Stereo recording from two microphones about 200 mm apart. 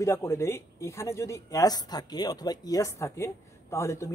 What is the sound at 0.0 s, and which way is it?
A man's voice, 15° left (ahead or behind).